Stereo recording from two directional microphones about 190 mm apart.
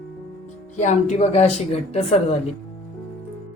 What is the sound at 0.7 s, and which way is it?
A woman's voice, 40° left (ahead or behind).